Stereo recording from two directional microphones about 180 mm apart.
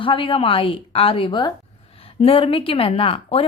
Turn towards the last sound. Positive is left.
turn(degrees=30)  # may be behind; listen again after turning